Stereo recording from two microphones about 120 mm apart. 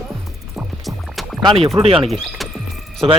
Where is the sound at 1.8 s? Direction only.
55° right (ahead or behind).